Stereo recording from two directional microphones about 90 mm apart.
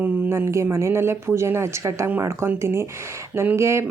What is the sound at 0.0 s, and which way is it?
Speech, 25° right (ahead or behind).